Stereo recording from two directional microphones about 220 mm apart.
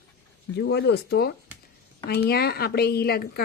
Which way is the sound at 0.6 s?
50° left (ahead or behind).